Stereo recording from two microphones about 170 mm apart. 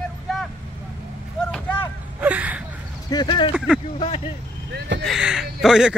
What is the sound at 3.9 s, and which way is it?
Vehicle, 35° left (ahead or behind).